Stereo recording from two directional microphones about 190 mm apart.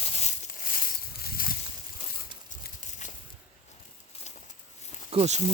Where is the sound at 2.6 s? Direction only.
40° left (ahead or behind).